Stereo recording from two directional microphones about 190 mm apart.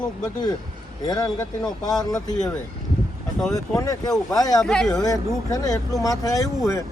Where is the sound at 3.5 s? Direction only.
20° left (ahead or behind).